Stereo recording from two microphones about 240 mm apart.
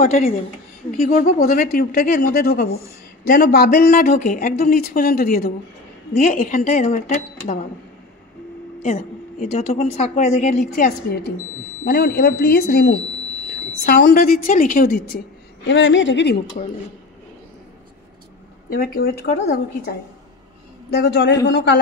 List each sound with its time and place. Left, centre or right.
0.0 s a woman's voice: left
8.8 s a woman's voice: left
16.6 s a woman's voice: left
18.7 s a woman's voice: left